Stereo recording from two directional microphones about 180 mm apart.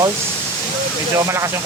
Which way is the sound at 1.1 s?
15° right (ahead or behind).